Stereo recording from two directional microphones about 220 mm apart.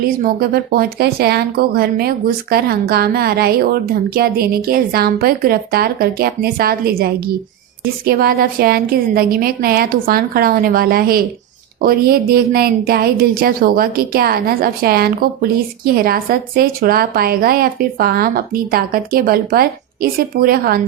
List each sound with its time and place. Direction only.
0.0 s a woman's voice: 45° right (ahead or behind)